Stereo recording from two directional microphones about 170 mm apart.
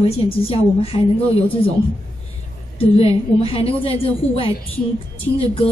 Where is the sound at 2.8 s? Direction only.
35° left (ahead or behind).